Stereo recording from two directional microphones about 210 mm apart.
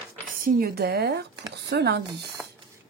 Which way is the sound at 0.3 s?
45° right (ahead or behind).